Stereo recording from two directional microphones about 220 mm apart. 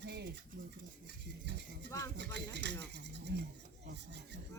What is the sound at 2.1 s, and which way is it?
Speech, 50° right (ahead or behind).